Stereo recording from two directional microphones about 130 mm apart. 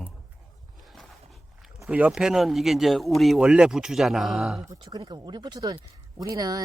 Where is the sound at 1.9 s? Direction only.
10° right (ahead or behind).